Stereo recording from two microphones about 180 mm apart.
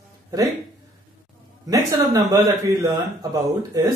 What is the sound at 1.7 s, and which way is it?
Speech, 20° right (ahead or behind).